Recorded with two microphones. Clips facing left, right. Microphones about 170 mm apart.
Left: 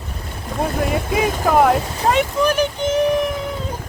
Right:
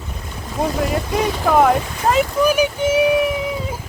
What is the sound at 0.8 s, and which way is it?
Speech, centre (ahead or behind).